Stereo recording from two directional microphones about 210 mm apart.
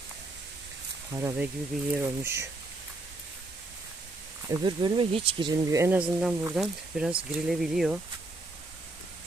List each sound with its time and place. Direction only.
1.1 s speech: 15° right (ahead or behind)
4.4 s speech: 20° right (ahead or behind); by 7.9 s 5° right (ahead or behind)